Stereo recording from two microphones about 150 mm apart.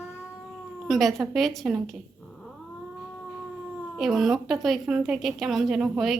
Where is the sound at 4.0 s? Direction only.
Centre (ahead or behind).